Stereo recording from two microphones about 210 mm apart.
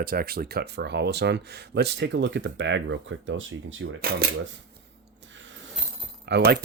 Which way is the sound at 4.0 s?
45° right (ahead or behind).